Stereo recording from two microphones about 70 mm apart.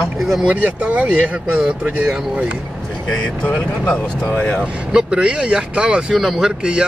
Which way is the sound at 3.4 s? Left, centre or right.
Centre.